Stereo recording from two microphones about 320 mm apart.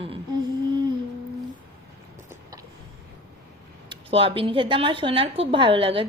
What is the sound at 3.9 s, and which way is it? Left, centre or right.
Speech, centre.